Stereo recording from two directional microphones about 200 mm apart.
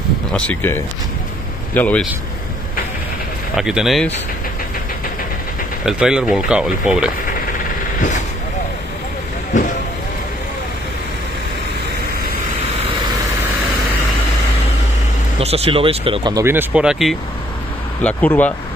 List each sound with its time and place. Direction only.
0.3 s speech: 5° left (ahead or behind)
3.5 s speech: centre (ahead or behind)
5.9 s speech: 5° right (ahead or behind)
15.4 s speech: 30° right (ahead or behind); by 18.5 s 5° left (ahead or behind)